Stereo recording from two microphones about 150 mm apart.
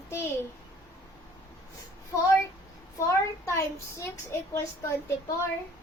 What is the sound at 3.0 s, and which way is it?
A child's voice, 20° left (ahead or behind).